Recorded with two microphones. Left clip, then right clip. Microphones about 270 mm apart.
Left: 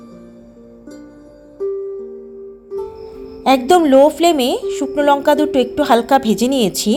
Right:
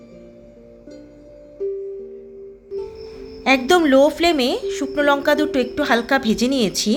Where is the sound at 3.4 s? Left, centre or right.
Centre.